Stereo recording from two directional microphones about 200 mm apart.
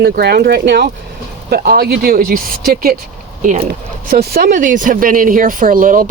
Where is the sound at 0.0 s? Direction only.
50° right (ahead or behind).